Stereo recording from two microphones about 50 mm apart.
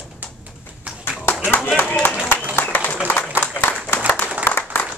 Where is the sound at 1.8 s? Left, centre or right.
Left.